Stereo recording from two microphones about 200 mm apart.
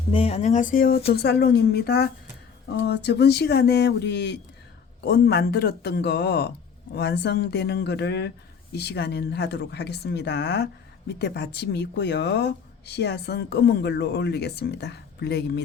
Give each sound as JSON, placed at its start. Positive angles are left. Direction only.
{"t": 0.1, "sound": "a woman's voice", "side_deg": 30}